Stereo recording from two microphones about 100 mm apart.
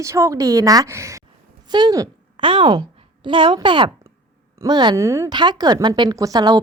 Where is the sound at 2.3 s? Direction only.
55° right (ahead or behind).